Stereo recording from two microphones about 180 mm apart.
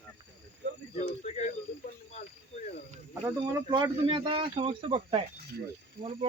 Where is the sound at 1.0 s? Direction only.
40° left (ahead or behind).